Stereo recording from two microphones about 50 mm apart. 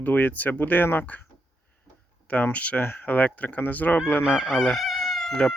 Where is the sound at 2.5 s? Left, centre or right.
Left.